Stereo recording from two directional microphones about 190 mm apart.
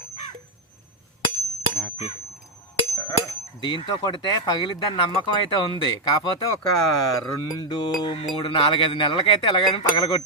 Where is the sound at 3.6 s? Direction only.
25° left (ahead or behind).